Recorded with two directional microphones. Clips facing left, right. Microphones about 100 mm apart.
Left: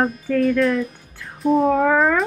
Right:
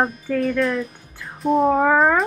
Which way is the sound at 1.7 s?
35° right (ahead or behind).